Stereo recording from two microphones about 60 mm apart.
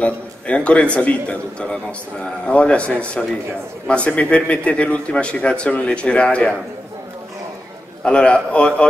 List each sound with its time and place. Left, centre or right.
0.0 s a man's voice: centre
8.0 s a man's voice: centre